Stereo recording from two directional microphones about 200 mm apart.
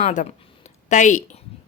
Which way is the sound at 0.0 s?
40° left (ahead or behind).